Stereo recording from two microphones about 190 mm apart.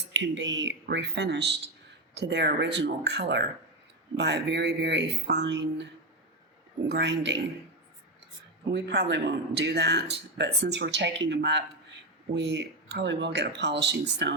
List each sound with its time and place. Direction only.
0.1 s speech: 70° right (ahead or behind)
8.7 s speech: 65° right (ahead or behind)